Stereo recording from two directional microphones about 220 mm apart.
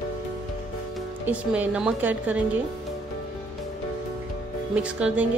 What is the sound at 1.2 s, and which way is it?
A woman's voice, 5° right (ahead or behind).